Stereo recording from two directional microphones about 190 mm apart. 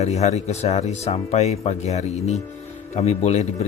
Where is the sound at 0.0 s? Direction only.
35° left (ahead or behind).